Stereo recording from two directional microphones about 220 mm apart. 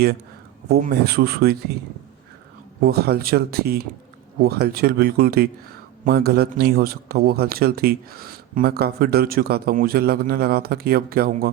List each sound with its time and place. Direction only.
0.7 s a man's voice: 45° right (ahead or behind)
2.8 s a man's voice: 45° right (ahead or behind)